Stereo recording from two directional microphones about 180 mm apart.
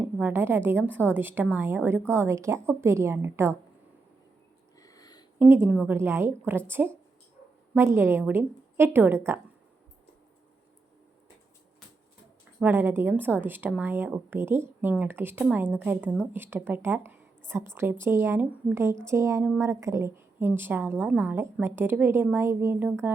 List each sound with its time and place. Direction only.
0.2 s a woman's voice: 10° right (ahead or behind)
4.8 s a sound: 20° left (ahead or behind)
5.4 s a woman's voice: 15° right (ahead or behind)
12.5 s a woman's voice: 10° right (ahead or behind)